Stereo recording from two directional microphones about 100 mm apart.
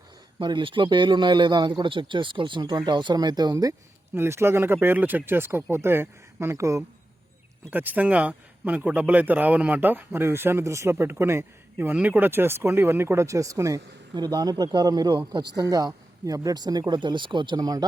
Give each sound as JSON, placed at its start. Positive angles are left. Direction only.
{"t": 0.3, "sound": "a man's voice", "side_deg": -55}
{"t": 4.1, "sound": "speech", "side_deg": -25}
{"t": 7.7, "sound": "a man's voice", "side_deg": -15}